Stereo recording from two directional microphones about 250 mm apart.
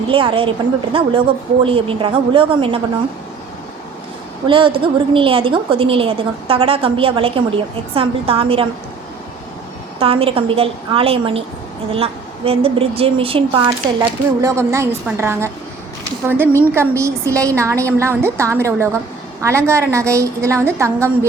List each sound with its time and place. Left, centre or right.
0.1 s a woman's voice: right
4.4 s a woman's voice: centre
10.0 s a woman's voice: right